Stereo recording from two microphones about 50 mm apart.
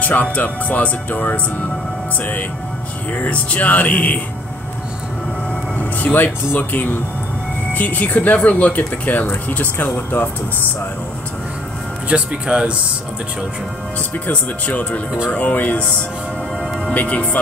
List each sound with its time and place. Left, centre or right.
0.0 s speech: left
3.2 s speech: left
5.8 s speech: left
12.1 s speech: right
14.3 s speech: left
16.9 s speech: left